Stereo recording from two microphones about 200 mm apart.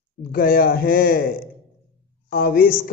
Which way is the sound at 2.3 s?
50° left (ahead or behind).